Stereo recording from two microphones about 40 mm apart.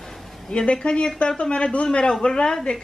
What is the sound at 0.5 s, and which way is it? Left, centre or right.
A woman's voice, left.